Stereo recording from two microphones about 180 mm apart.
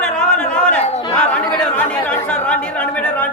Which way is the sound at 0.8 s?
35° left (ahead or behind).